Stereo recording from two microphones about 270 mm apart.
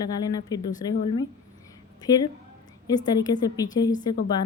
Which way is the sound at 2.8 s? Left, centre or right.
Centre.